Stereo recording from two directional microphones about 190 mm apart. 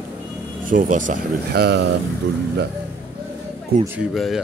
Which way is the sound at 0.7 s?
45° right (ahead or behind).